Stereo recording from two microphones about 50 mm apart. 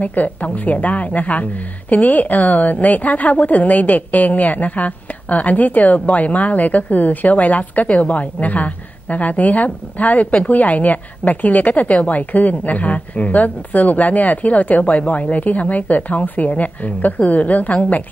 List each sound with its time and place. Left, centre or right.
0.0 s a woman's voice: left